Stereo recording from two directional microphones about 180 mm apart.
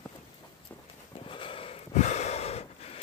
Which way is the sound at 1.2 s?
30° left (ahead or behind).